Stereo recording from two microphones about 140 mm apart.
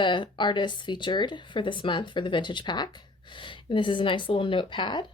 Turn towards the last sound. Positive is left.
turn(degrees=35)  # may be behind; listen again after turning